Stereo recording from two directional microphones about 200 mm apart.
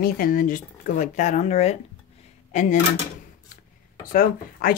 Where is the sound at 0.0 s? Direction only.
45° left (ahead or behind).